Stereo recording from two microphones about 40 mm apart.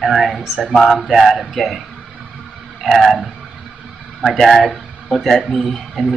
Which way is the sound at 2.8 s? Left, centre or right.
Centre.